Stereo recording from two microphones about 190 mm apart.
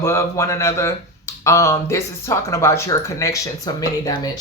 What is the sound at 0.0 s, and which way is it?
Speech, 15° left (ahead or behind).